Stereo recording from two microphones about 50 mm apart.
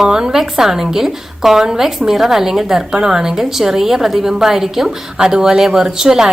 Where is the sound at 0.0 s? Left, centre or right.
Centre.